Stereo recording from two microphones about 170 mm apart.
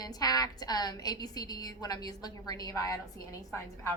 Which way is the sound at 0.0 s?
20° left (ahead or behind).